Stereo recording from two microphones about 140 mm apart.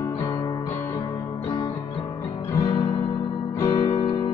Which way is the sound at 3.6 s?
30° left (ahead or behind).